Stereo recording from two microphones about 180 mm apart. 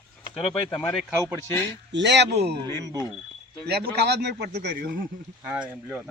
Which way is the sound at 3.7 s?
65° right (ahead or behind).